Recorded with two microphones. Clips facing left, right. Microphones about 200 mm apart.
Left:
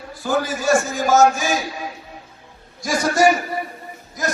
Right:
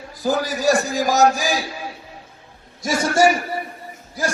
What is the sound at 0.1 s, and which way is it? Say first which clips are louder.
A man's voice: even; 40° right (ahead or behind).